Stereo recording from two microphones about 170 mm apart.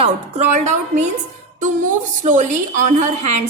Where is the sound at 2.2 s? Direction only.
50° right (ahead or behind).